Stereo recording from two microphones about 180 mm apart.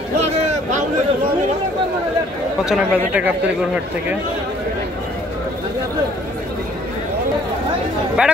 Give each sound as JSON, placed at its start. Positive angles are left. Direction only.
{"t": 0.3, "sound": "a sound", "side_deg": -35}
{"t": 2.6, "sound": "a man's voice", "side_deg": -5}
{"t": 8.2, "sound": "a man's voice", "side_deg": -5}